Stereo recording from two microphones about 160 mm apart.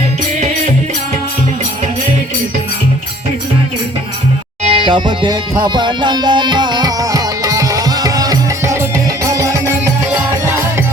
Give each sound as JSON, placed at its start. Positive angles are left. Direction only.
{"t": 4.6, "sound": "music", "side_deg": -35}